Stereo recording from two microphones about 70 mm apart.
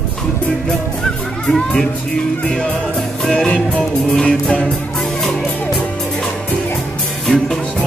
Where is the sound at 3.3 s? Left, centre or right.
Centre.